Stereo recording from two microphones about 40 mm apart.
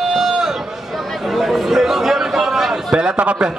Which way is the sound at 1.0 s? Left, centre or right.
Centre.